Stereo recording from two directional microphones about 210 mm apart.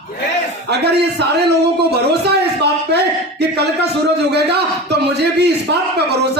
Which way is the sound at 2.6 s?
50° right (ahead or behind).